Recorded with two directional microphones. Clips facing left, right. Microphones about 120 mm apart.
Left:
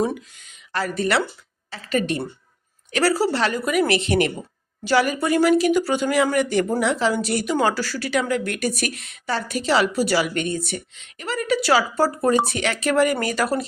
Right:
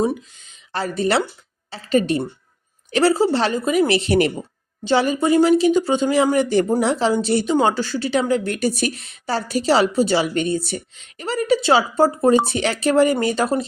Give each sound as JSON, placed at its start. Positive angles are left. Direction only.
{"t": 0.7, "sound": "a woman's voice", "side_deg": -30}